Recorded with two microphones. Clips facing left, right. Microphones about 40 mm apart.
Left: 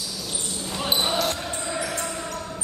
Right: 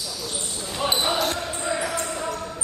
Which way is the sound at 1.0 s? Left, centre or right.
Centre.